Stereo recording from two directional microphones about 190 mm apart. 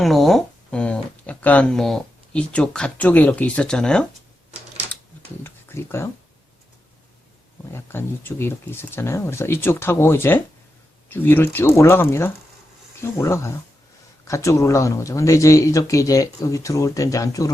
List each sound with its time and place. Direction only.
0.0 s speech: centre (ahead or behind)
5.4 s speech: 10° left (ahead or behind)
7.7 s speech: 10° left (ahead or behind)